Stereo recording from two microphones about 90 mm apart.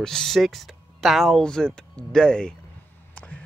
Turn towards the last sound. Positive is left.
turn(degrees=15)  # may be behind; listen again after turning